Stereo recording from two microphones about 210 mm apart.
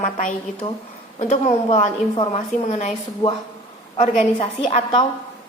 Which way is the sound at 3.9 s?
35° left (ahead or behind).